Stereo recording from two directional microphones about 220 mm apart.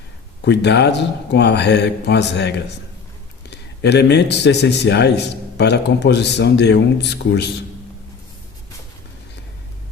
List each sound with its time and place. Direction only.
0.4 s a man's voice: 50° left (ahead or behind)